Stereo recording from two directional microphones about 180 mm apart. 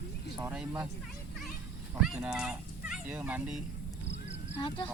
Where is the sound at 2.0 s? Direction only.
5° right (ahead or behind).